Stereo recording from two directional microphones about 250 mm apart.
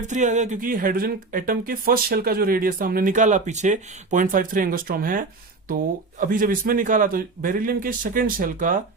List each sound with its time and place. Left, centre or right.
0.1 s speech: right